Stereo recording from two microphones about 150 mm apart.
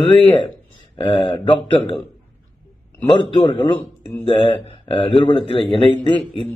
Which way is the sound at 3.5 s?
35° left (ahead or behind).